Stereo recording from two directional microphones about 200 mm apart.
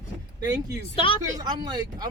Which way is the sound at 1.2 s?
20° right (ahead or behind).